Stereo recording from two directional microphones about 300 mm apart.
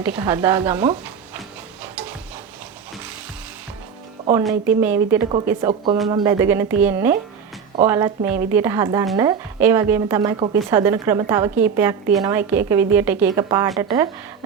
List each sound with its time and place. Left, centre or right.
0.0 s a woman's voice: centre
1.8 s stir: centre
4.8 s a woman's voice: centre
8.3 s a woman's voice: right
8.5 s a woman's voice: centre